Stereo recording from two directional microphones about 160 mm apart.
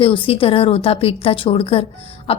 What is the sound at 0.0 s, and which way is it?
Speech, 35° left (ahead or behind).